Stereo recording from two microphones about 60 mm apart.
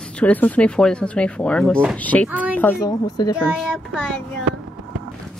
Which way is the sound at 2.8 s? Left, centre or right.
Left.